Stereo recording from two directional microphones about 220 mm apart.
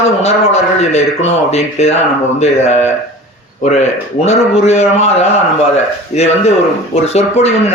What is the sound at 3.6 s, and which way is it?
A man's voice, 30° left (ahead or behind).